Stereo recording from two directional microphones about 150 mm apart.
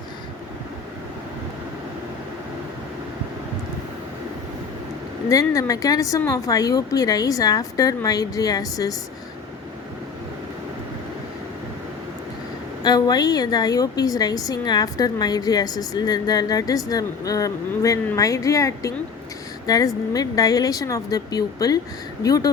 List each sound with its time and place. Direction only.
5.3 s a woman's voice: 25° left (ahead or behind)
12.8 s a woman's voice: 25° left (ahead or behind)